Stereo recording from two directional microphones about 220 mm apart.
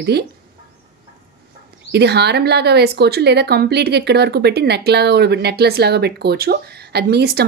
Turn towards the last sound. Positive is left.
turn(degrees=-45)  # may be behind; listen again after turning